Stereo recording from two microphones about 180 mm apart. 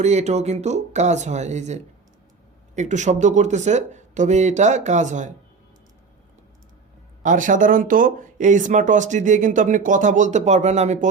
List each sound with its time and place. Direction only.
0.0 s speech: 40° right (ahead or behind)
7.2 s speech: 45° right (ahead or behind)